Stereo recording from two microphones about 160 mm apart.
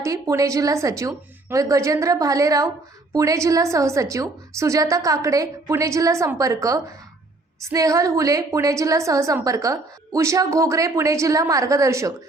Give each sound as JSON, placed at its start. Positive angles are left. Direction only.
{"t": 0.0, "sound": "a woman's voice", "side_deg": -20}